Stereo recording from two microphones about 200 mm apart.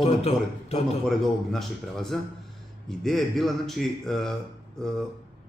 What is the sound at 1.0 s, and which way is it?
Speech, centre (ahead or behind).